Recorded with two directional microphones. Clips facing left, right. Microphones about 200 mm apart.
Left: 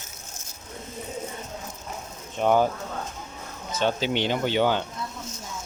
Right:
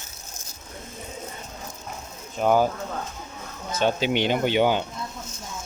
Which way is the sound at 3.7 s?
10° right (ahead or behind).